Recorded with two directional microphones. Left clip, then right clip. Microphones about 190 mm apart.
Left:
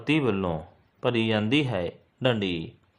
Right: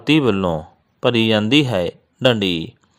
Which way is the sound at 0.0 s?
40° right (ahead or behind).